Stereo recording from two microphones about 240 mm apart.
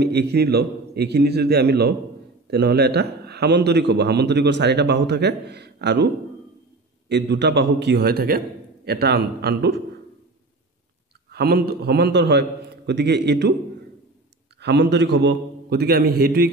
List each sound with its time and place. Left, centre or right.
0.0 s a man's voice: right
7.1 s a man's voice: right
11.2 s a man's voice: right
14.6 s a man's voice: right